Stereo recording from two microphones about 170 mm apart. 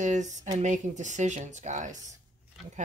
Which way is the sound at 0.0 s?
45° right (ahead or behind).